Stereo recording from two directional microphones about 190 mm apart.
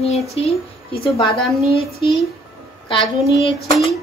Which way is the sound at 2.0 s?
25° left (ahead or behind).